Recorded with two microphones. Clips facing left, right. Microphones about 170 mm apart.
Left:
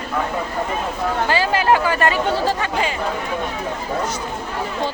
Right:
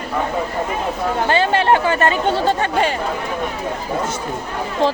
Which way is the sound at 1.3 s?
25° right (ahead or behind).